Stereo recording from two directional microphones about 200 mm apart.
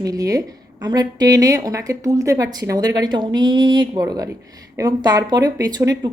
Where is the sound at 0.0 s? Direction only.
20° right (ahead or behind).